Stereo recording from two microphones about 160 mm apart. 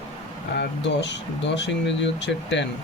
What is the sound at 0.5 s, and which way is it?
Speech, 90° left.